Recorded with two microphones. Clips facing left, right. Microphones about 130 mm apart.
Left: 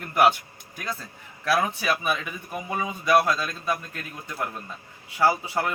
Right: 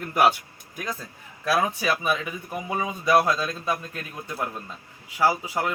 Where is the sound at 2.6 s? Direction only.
15° right (ahead or behind).